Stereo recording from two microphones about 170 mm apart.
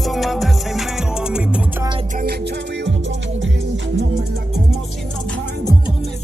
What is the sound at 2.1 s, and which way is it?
Music, 60° right (ahead or behind).